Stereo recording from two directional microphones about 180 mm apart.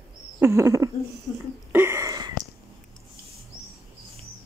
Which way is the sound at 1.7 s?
15° right (ahead or behind).